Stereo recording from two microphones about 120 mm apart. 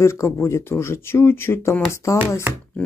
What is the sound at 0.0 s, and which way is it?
Speech, 25° left (ahead or behind).